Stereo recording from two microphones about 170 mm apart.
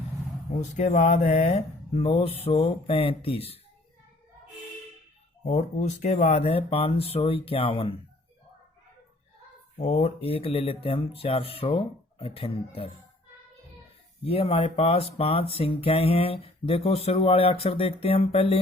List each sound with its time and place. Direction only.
0.6 s speech: 40° left (ahead or behind)
5.5 s speech: 45° left (ahead or behind)
9.7 s speech: 40° left (ahead or behind)
14.3 s speech: 35° left (ahead or behind)